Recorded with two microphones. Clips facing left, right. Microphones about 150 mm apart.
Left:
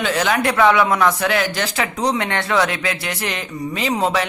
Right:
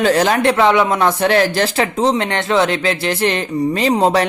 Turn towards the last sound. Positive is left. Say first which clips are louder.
# right 5 dB
turn(degrees=-35)  # may be behind; listen again after turning